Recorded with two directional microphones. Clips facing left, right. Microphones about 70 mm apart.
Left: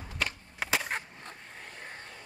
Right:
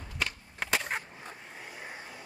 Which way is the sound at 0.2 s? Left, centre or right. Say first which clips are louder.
Even; centre.